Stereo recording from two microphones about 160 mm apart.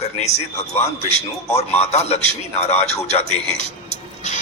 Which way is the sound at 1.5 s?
40° left (ahead or behind).